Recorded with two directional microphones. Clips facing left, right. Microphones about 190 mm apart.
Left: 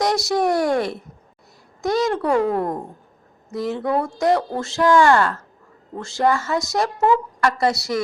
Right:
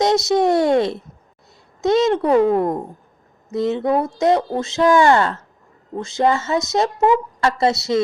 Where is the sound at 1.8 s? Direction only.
25° right (ahead or behind).